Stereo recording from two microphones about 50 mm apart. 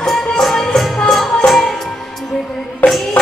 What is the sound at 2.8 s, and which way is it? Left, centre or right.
Music, left.